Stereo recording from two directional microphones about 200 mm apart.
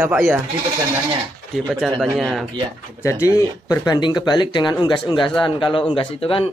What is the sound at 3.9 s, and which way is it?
Speech, 20° left (ahead or behind).